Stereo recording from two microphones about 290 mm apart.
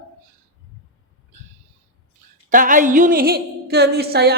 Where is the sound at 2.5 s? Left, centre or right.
Right.